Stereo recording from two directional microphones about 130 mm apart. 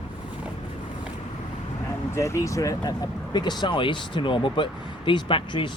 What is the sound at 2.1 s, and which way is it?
Speech, 20° left (ahead or behind).